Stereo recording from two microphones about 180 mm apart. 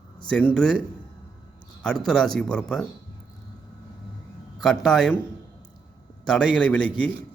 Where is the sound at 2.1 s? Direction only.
Centre (ahead or behind).